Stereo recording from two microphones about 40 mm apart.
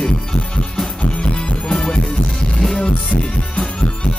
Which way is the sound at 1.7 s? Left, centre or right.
Centre.